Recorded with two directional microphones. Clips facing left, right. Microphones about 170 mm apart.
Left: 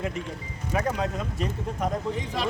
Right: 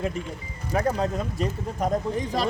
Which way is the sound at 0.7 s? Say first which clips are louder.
Right 3 dB; 35° right (ahead or behind).